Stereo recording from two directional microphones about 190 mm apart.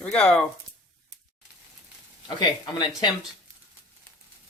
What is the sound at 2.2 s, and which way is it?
Speech, 20° left (ahead or behind).